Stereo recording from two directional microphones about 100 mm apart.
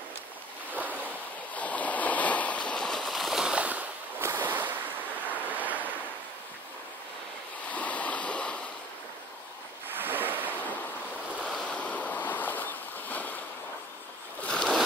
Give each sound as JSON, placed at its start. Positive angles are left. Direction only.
{"t": 0.7, "sound": "waves", "side_deg": -15}
{"t": 1.5, "sound": "stream", "side_deg": 15}
{"t": 4.2, "sound": "waves", "side_deg": -20}
{"t": 7.7, "sound": "stream", "side_deg": 15}
{"t": 9.9, "sound": "ocean", "side_deg": -20}
{"t": 11.3, "sound": "waves", "side_deg": 10}
{"t": 13.1, "sound": "boat", "side_deg": 15}
{"t": 14.4, "sound": "a sound", "side_deg": 10}